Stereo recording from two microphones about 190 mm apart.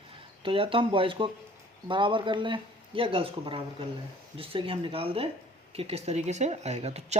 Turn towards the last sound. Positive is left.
turn(degrees=-35)  # may be behind; listen again after turning